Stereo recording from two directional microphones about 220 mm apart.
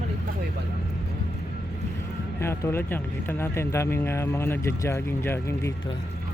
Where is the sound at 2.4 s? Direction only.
10° left (ahead or behind).